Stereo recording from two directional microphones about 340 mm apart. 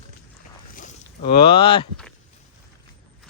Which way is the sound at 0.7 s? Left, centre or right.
Left.